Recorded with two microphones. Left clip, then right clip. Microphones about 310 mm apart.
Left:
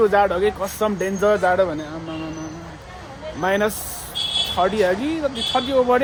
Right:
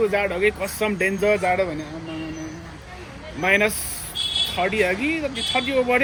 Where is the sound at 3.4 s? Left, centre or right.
Centre.